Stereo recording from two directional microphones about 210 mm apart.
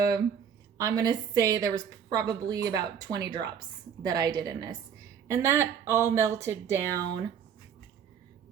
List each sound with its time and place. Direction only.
0.8 s a woman's voice: 15° right (ahead or behind)